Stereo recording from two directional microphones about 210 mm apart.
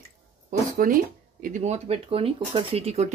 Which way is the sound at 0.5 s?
40° right (ahead or behind).